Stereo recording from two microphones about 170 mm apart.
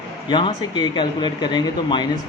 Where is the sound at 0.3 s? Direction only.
25° left (ahead or behind).